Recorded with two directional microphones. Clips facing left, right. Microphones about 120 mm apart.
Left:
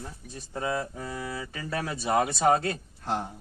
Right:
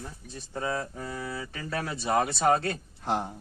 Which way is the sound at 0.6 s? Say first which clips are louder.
Left 1 dB; 10° left (ahead or behind).